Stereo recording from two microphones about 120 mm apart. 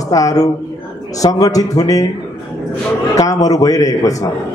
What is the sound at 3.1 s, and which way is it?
Speech, 30° left (ahead or behind).